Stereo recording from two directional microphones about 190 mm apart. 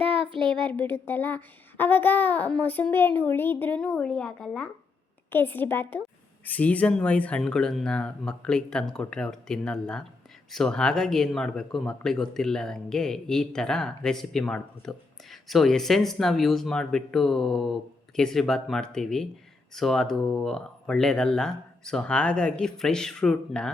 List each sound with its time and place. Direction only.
0.0 s child singing: 30° right (ahead or behind)
0.5 s a child's voice: 5° left (ahead or behind)